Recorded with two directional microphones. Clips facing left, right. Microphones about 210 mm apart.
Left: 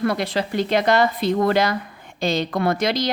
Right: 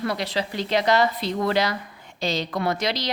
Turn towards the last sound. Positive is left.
turn(degrees=50)  # may be behind; listen again after turning